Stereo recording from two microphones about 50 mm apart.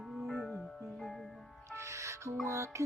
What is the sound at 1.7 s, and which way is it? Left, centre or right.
Music, right.